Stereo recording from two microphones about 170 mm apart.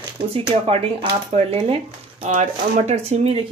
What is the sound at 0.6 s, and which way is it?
A woman's voice, 35° right (ahead or behind).